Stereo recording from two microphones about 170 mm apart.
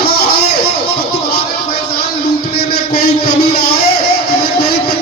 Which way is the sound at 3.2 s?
65° left (ahead or behind).